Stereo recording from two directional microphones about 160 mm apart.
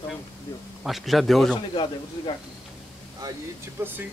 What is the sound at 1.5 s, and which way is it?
Speech, 30° left (ahead or behind).